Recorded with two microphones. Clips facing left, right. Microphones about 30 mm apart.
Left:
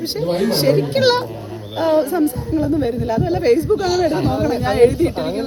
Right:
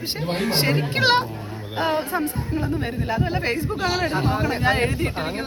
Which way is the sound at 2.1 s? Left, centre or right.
Right.